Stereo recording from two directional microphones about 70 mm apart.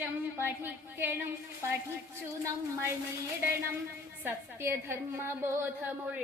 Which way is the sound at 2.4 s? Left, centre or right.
Right.